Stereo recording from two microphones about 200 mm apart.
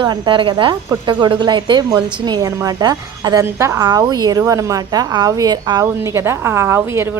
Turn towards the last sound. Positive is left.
turn(degrees=-10)  # may be behind; listen again after turning